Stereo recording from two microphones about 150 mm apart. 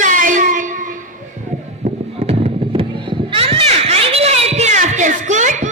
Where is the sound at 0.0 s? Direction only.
60° right (ahead or behind).